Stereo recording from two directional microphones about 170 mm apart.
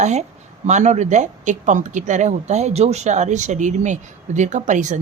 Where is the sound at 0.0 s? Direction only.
45° right (ahead or behind).